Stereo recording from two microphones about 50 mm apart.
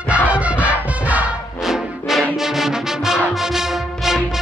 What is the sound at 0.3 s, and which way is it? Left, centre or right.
Music, right.